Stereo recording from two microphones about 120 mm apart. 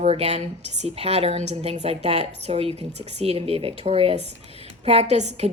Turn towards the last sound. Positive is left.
turn(degrees=-65)  # may be behind; listen again after turning